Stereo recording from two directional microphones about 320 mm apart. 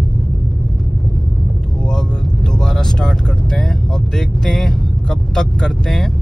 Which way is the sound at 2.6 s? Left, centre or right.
Centre.